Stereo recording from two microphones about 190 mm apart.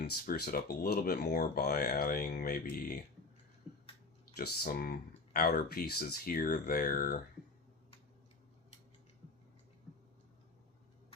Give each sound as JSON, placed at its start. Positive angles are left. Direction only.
{"t": 0.3, "sound": "speech", "side_deg": 50}
{"t": 4.4, "sound": "speech", "side_deg": 50}